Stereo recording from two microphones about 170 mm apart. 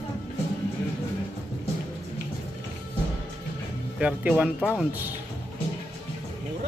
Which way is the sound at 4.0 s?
5° right (ahead or behind).